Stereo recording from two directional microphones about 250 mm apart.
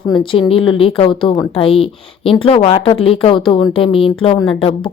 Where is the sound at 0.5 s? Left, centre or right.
Left.